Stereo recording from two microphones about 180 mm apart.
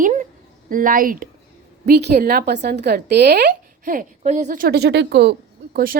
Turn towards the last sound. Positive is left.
turn(degrees=-55)  # may be behind; listen again after turning